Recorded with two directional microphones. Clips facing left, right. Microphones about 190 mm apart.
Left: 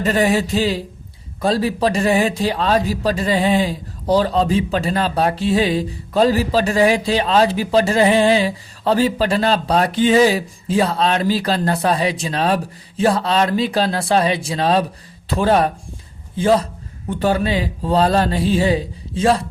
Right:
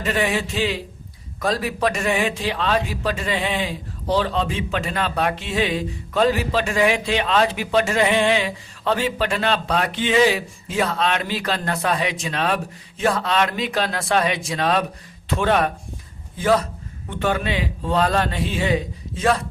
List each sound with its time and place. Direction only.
0.0 s a man's voice: 40° left (ahead or behind)